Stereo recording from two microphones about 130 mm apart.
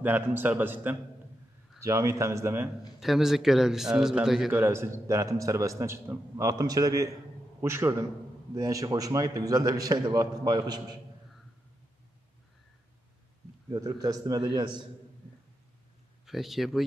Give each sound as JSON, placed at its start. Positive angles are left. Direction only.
{"t": 0.0, "sound": "a man's voice", "side_deg": -15}
{"t": 3.0, "sound": "a man's voice", "side_deg": 0}
{"t": 4.6, "sound": "a man's voice", "side_deg": -20}
{"t": 13.7, "sound": "a man's voice", "side_deg": -25}
{"t": 16.3, "sound": "a man's voice", "side_deg": 0}